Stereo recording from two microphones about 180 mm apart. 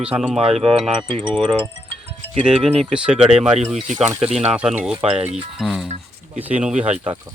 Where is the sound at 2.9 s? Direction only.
5° right (ahead or behind).